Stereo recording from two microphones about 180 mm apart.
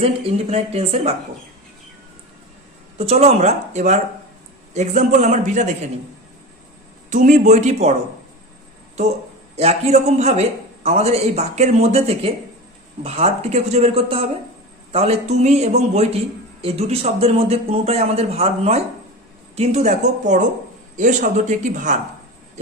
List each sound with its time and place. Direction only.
0.0 s a man's voice: 35° right (ahead or behind)
3.0 s a man's voice: 35° right (ahead or behind)
7.1 s a man's voice: 45° right (ahead or behind)
9.6 s a man's voice: 35° right (ahead or behind)